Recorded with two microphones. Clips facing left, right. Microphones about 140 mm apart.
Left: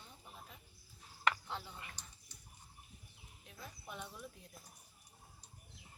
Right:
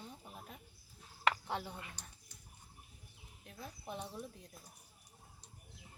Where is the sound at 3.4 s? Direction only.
40° right (ahead or behind).